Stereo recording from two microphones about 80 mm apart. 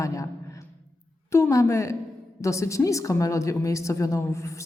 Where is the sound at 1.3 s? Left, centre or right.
Left.